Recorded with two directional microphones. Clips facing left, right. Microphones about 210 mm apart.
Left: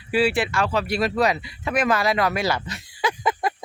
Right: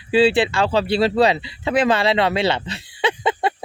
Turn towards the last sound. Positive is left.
turn(degrees=-30)  # may be behind; listen again after turning